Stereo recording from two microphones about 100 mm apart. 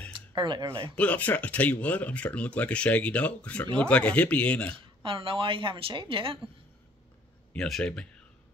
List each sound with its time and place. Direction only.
0.3 s speech: 50° right (ahead or behind)
0.9 s speech: 15° left (ahead or behind)
5.0 s a woman's voice: 60° right (ahead or behind)
7.5 s speech: 5° left (ahead or behind)